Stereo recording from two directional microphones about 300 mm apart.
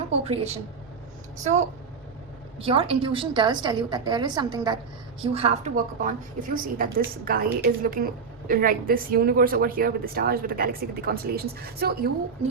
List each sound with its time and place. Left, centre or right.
2.6 s a woman's voice: centre